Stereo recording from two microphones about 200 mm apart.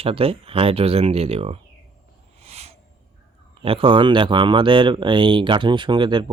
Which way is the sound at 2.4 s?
30° right (ahead or behind).